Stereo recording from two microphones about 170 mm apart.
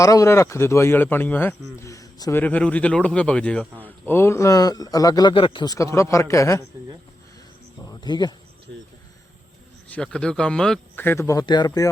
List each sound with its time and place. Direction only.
0.0 s a man's voice: 20° left (ahead or behind)
2.4 s a man's voice: 10° left (ahead or behind)
7.8 s insect: 25° left (ahead or behind)
9.9 s a man's voice: 5° left (ahead or behind); by 11.9 s 25° left (ahead or behind)